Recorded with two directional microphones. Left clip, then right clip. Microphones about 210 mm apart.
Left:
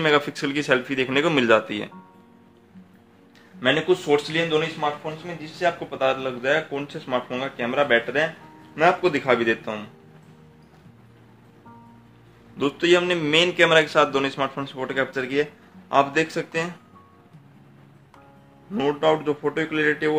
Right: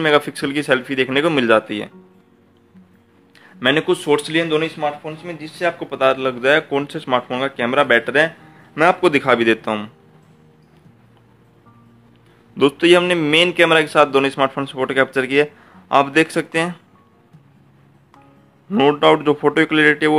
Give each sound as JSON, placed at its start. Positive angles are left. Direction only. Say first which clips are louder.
{"t": 0.0, "sound": "speech", "louder": "right 4 dB", "side_deg": -20}
{"t": 3.5, "sound": "speech", "louder": "right 4 dB", "side_deg": -45}
{"t": 12.5, "sound": "a man's voice", "louder": "right 7 dB", "side_deg": -35}
{"t": 18.7, "sound": "speech", "louder": "right 8 dB", "side_deg": -45}